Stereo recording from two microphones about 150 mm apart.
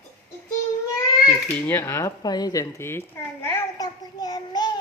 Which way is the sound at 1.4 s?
15° left (ahead or behind).